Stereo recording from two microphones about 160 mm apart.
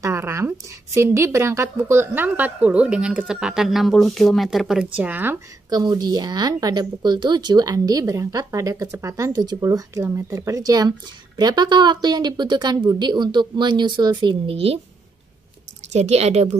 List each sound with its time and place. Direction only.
0.0 s a woman's voice: 15° right (ahead or behind)
5.7 s speech: 25° right (ahead or behind)
15.9 s a woman's voice: 45° right (ahead or behind)